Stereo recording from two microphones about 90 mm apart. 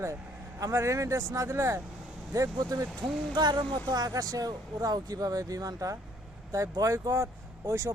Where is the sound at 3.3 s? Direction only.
55° right (ahead or behind).